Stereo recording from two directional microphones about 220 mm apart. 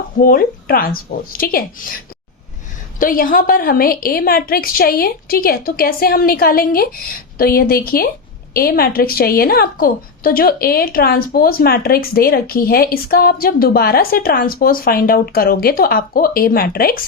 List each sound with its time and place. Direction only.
0.2 s a woman's voice: 40° left (ahead or behind)
3.0 s a woman's voice: 40° left (ahead or behind)